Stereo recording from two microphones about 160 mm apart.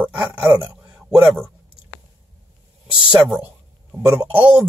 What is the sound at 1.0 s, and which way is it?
Speech, 5° right (ahead or behind).